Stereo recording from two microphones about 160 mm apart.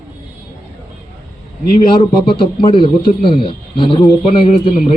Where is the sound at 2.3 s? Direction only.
30° left (ahead or behind).